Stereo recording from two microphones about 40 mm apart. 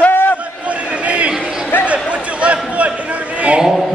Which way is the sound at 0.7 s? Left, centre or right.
Right.